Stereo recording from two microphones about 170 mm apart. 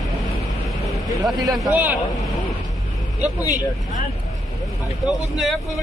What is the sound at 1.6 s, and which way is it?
Speech, 10° right (ahead or behind).